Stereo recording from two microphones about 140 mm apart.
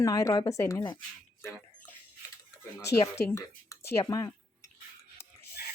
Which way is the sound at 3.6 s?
25° left (ahead or behind).